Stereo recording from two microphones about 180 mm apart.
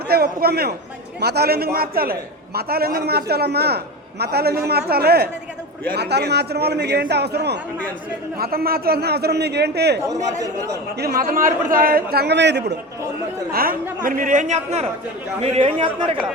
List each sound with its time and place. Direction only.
0.1 s a man's voice: 60° right (ahead or behind)
8.4 s a man's voice: 55° right (ahead or behind)
10.1 s a man's voice: 20° right (ahead or behind)
11.0 s a man's voice: 55° right (ahead or behind); by 12.7 s 70° right (ahead or behind)
13.5 s a man's voice: 55° right (ahead or behind); by 16.1 s 30° right (ahead or behind)